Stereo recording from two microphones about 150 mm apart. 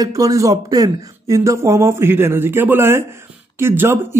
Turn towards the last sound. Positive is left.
turn(degrees=-15)  # may be behind; listen again after turning